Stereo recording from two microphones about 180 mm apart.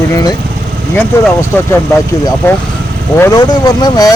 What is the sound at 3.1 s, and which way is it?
Speech, 15° left (ahead or behind).